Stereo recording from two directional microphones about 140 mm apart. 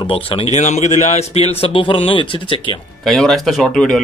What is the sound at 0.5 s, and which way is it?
A man's voice, 55° left (ahead or behind).